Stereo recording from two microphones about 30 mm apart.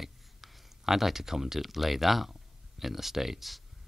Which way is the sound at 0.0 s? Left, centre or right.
Centre.